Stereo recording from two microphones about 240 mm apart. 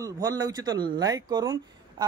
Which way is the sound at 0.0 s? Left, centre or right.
Centre.